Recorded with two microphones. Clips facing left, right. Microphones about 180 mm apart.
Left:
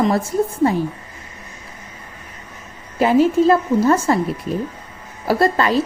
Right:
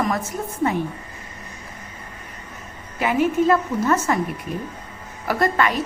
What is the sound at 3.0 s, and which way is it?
A woman's voice, 30° left (ahead or behind).